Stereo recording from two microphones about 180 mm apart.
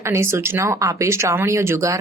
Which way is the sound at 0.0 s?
15° right (ahead or behind).